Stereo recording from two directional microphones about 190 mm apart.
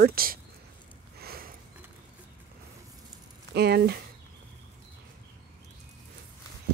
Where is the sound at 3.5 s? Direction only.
60° right (ahead or behind).